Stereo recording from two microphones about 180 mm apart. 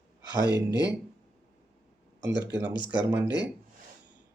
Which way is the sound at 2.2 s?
75° right (ahead or behind).